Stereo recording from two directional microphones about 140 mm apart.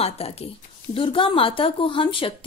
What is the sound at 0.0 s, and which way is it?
A woman's voice, 45° left (ahead or behind).